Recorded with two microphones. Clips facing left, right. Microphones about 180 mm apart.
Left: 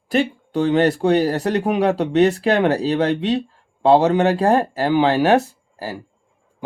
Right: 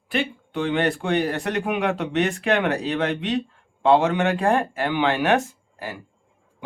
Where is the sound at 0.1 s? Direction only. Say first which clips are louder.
Left 6 dB; 40° left (ahead or behind).